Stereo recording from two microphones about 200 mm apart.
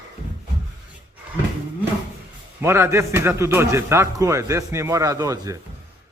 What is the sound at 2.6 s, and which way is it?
A man's voice, 10° right (ahead or behind).